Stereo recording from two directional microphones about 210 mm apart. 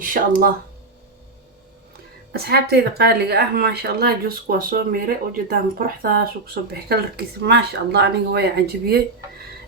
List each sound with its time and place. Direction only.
0.0 s speech: 40° right (ahead or behind)
2.3 s speech: 50° right (ahead or behind)